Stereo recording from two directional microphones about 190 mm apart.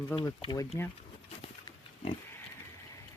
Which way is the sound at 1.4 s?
25° left (ahead or behind).